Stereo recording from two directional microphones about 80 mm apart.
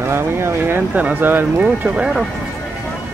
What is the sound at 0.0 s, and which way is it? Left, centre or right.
Speech, right.